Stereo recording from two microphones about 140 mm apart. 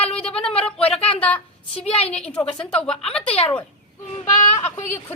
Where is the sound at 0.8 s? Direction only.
45° left (ahead or behind).